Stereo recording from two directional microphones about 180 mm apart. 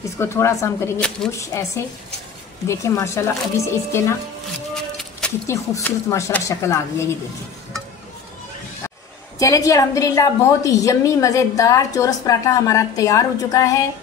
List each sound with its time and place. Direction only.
0.0 s speech: 15° left (ahead or behind)
9.4 s a woman's voice: 20° left (ahead or behind)